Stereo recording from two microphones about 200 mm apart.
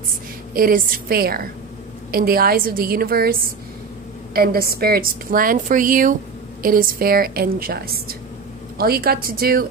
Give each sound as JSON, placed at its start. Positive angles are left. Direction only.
{"t": 0.6, "sound": "a woman's voice", "side_deg": -45}